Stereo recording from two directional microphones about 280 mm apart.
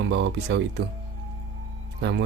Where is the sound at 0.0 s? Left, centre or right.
Right.